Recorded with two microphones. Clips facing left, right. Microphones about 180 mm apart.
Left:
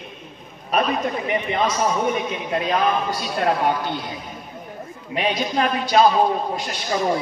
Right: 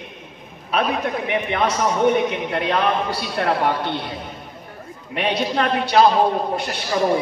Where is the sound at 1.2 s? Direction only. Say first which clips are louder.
Right 2 dB; 65° right (ahead or behind).